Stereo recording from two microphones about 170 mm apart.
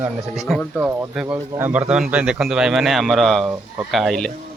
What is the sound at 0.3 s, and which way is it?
Speech, centre (ahead or behind).